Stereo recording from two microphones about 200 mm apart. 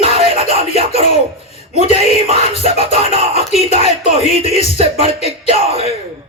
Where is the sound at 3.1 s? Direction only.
30° right (ahead or behind).